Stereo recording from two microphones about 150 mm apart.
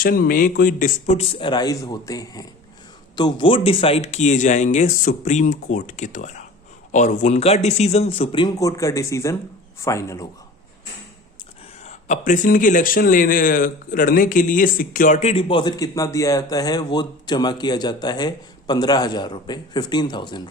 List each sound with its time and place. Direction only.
0.0 s speech: 75° left (ahead or behind); by 10.2 s 20° left (ahead or behind)
11.8 s speech: 50° left (ahead or behind); by 20.5 s 30° left (ahead or behind)